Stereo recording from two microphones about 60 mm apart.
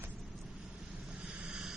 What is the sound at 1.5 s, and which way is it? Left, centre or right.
Vehicle, centre.